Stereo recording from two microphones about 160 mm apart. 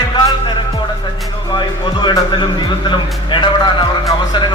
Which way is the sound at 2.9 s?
30° left (ahead or behind).